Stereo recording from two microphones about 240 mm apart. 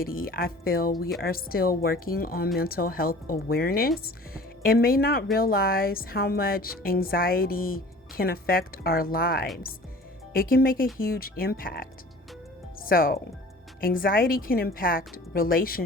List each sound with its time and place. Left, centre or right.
0.0 s speech: left